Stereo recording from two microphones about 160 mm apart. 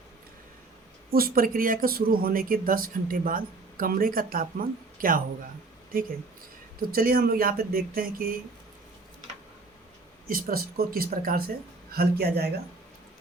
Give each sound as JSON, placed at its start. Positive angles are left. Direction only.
{"t": 1.1, "sound": "speech", "side_deg": -65}
{"t": 6.9, "sound": "speech", "side_deg": -65}
{"t": 10.2, "sound": "speech", "side_deg": -65}